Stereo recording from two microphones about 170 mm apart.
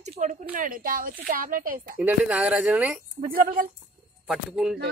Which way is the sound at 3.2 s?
55° right (ahead or behind).